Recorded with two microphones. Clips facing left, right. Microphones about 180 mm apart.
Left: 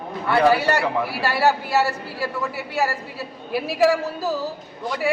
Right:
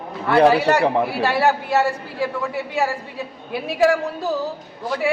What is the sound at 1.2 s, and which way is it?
A man's voice, centre (ahead or behind).